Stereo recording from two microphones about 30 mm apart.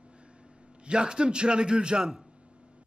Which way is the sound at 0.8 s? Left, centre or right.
Right.